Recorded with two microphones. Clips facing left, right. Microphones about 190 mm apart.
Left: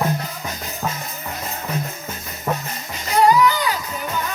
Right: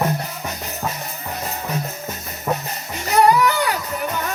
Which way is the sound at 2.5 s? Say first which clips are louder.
Right 1 dB; 5° right (ahead or behind).